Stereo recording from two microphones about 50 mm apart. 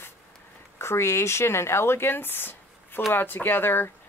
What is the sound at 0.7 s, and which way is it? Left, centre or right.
Speech, left.